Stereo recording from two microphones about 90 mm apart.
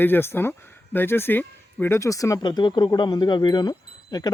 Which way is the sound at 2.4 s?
55° left (ahead or behind).